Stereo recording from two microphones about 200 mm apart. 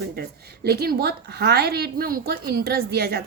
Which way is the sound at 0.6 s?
50° right (ahead or behind).